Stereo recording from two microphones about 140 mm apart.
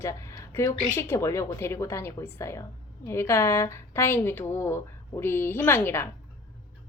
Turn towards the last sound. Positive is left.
turn(degrees=15)  # may be behind; listen again after turning